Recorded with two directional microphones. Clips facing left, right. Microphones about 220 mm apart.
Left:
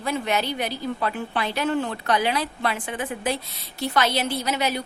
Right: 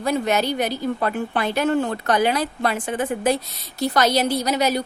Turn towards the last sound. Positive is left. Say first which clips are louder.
# right 5 dB
turn(degrees=-40)  # may be behind; listen again after turning